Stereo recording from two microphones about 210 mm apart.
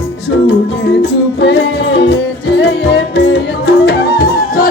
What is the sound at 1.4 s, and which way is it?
Music, 55° left (ahead or behind).